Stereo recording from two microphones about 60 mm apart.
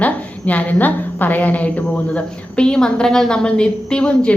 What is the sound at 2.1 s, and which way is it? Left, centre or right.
A woman's voice, centre.